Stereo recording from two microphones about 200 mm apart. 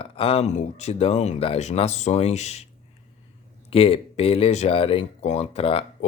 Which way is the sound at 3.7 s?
30° left (ahead or behind).